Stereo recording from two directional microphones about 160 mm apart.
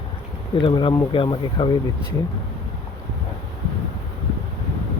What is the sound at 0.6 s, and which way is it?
Speech, 30° left (ahead or behind).